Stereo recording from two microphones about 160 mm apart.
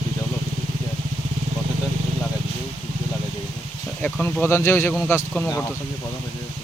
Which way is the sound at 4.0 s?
10° left (ahead or behind).